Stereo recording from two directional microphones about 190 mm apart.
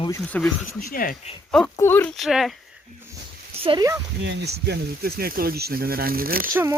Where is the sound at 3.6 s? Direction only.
20° right (ahead or behind).